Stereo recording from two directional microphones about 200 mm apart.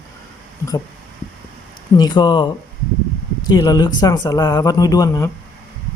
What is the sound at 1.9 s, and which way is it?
Speech, 20° left (ahead or behind).